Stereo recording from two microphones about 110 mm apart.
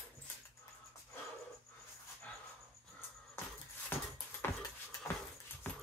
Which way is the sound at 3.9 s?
20° left (ahead or behind).